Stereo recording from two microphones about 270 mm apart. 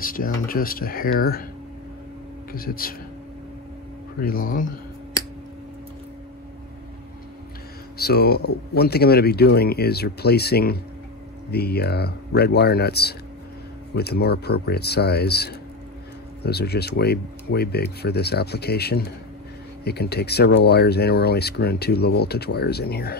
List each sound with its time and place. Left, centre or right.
0.0 s speech: left
2.5 s speech: left
4.2 s speech: left
8.0 s speech: left